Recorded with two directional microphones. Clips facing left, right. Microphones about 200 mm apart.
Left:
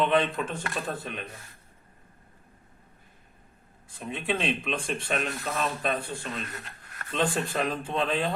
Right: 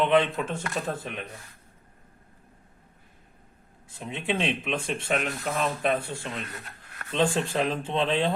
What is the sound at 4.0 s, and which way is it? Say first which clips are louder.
Speech: right 1 dB; 20° right (ahead or behind).